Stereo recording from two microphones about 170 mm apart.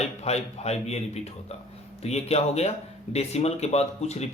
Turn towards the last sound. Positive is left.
turn(degrees=40)  # may be behind; listen again after turning